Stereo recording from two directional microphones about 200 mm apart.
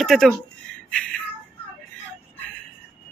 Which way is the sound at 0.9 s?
5° left (ahead or behind).